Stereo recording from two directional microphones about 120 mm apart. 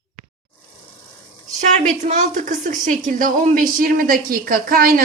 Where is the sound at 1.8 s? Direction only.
90° right.